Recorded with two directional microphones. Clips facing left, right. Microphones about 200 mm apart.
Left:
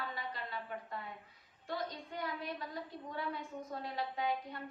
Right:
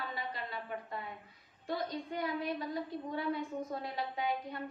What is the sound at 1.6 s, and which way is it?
A woman's voice, 15° right (ahead or behind).